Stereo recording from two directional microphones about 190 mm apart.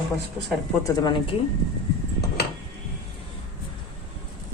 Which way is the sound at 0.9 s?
20° left (ahead or behind).